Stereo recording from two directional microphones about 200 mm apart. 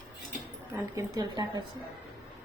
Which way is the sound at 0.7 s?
20° right (ahead or behind).